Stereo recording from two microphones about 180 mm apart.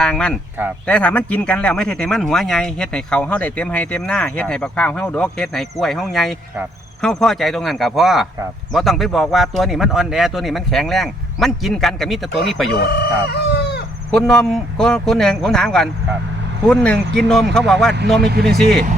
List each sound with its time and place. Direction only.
0.0 s speech: 5° left (ahead or behind)
12.9 s chicken: 65° left (ahead or behind)
14.1 s speech: centre (ahead or behind)
18.2 s speech: 60° right (ahead or behind)
18.4 s speech: centre (ahead or behind)